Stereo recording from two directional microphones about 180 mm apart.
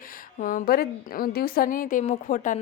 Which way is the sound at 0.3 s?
50° left (ahead or behind).